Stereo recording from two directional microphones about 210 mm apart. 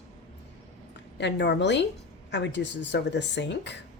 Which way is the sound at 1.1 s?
55° left (ahead or behind).